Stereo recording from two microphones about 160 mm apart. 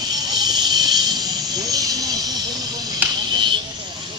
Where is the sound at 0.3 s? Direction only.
25° right (ahead or behind).